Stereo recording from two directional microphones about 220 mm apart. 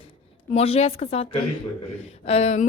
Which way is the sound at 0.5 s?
30° left (ahead or behind).